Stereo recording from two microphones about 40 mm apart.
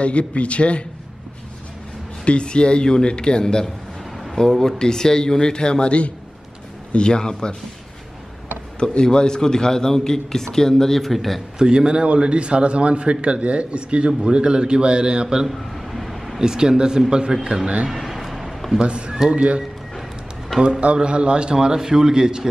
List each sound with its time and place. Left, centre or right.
0.0 s speech: left
2.2 s a man's voice: left
8.7 s a man's voice: left; by 11.4 s centre
11.5 s a man's voice: centre
15.5 s a sound: centre
16.3 s a man's voice: centre
17.8 s a sound: centre
18.8 s a man's voice: right
20.8 s a man's voice: right